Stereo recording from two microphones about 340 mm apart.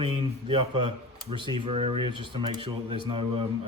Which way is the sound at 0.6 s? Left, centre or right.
Right.